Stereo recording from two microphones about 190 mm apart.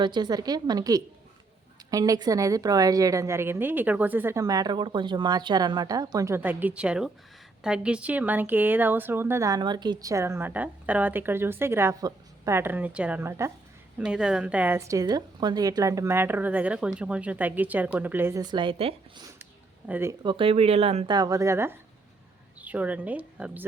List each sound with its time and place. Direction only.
0.0 s speech: 25° right (ahead or behind)
19.9 s speech: 15° right (ahead or behind)
20.2 s speech: 25° right (ahead or behind); by 23.6 s 10° right (ahead or behind)